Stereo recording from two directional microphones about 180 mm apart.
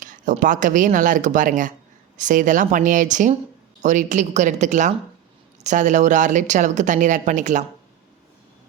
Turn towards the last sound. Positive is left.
turn(degrees=-45)  # may be behind; listen again after turning